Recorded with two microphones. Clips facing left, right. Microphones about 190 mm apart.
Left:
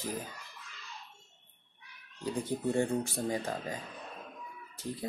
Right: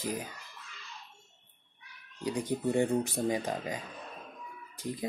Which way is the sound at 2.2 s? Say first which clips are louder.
Right 2 dB; 15° right (ahead or behind).